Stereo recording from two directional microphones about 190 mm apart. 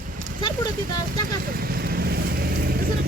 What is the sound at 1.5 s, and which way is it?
Vehicle, 50° right (ahead or behind).